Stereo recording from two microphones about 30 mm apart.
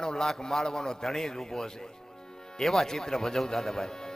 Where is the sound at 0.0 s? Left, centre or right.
Left.